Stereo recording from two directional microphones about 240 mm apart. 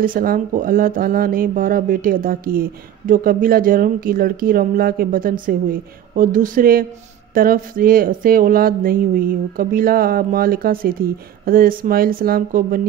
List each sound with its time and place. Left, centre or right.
0.0 s speech: right